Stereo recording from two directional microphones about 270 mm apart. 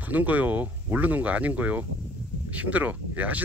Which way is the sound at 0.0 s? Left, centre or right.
Centre.